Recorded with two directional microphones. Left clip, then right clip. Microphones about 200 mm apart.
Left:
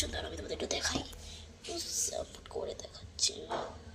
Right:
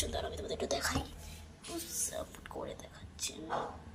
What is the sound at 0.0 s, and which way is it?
Speech, 5° left (ahead or behind).